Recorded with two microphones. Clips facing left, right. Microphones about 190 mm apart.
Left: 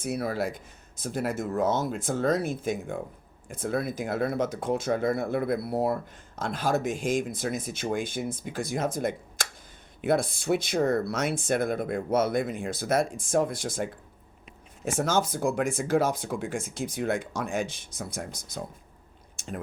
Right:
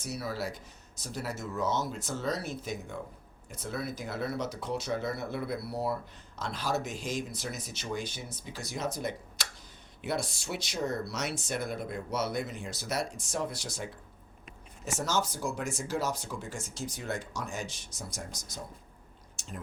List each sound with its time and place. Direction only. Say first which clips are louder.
0.0 s speech: left 7 dB; 55° left (ahead or behind)